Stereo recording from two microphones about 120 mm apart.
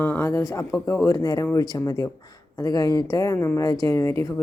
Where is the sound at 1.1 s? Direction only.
30° left (ahead or behind).